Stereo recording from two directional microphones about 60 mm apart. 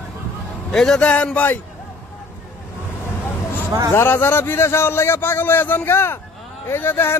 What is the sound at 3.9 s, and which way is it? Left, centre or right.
A man's voice, left.